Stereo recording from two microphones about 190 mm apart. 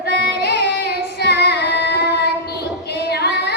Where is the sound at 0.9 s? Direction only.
60° left (ahead or behind).